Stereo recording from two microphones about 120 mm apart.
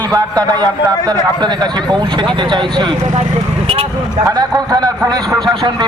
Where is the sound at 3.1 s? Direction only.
60° right (ahead or behind).